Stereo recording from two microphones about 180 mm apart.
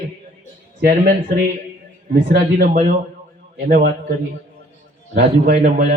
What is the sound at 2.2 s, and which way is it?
Speech, 55° right (ahead or behind).